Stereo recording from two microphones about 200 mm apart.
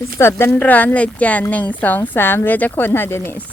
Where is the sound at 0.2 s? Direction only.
10° left (ahead or behind).